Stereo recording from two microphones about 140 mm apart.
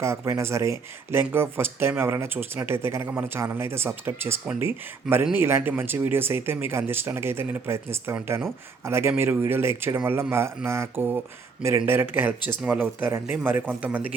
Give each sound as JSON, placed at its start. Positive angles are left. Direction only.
{"t": 0.0, "sound": "speech", "side_deg": -20}